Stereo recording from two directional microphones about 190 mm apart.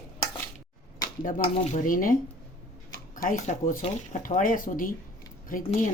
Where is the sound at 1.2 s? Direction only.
45° left (ahead or behind).